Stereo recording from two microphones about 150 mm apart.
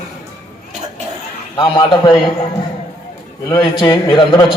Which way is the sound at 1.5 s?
30° left (ahead or behind).